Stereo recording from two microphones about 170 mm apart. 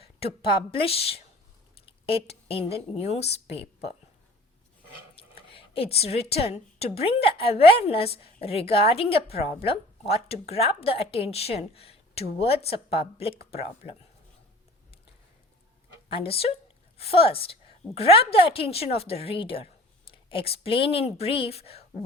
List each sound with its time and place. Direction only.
0.0 s a woman's voice: 35° left (ahead or behind)
5.1 s a sound: 35° left (ahead or behind)
6.0 s a woman's voice: 35° left (ahead or behind)
16.0 s a woman's voice: 35° left (ahead or behind)